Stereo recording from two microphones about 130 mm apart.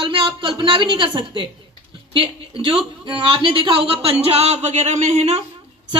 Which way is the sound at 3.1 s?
40° right (ahead or behind).